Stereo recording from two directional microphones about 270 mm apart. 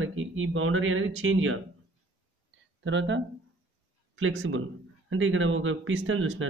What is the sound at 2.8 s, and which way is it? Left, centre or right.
Speech, right.